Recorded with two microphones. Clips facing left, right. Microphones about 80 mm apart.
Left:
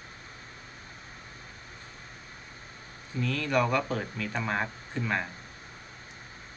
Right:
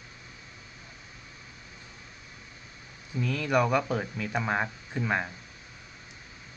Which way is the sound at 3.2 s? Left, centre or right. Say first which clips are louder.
Right 1 dB; centre.